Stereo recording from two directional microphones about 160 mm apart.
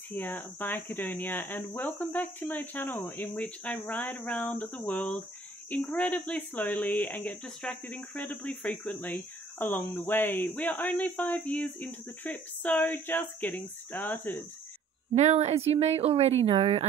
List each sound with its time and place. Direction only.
0.1 s speech: 10° left (ahead or behind)
15.1 s a woman's voice: 45° right (ahead or behind)